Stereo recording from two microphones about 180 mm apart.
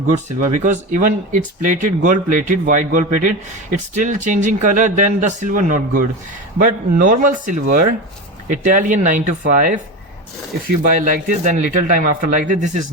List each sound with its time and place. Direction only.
0.1 s speech: 45° right (ahead or behind)
10.8 s speech: 50° right (ahead or behind)